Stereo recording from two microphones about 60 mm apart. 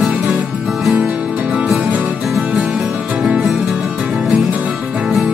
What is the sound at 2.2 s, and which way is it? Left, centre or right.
Music, centre.